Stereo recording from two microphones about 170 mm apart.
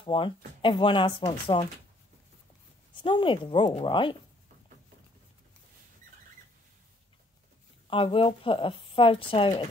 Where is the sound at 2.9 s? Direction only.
30° left (ahead or behind).